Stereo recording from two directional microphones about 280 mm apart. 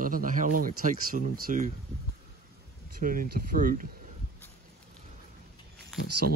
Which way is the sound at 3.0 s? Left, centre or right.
Right.